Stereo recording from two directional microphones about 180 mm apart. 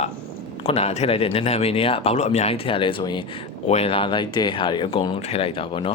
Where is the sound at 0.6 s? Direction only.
35° left (ahead or behind).